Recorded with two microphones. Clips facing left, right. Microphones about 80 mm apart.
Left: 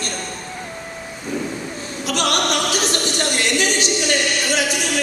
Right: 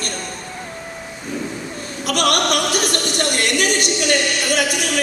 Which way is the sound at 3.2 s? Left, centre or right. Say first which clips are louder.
Right 1 dB; right.